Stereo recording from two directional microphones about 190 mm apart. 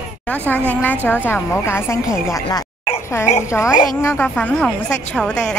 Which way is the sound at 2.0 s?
5° right (ahead or behind).